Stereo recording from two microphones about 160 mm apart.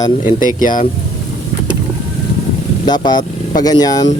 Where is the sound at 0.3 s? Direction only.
55° left (ahead or behind).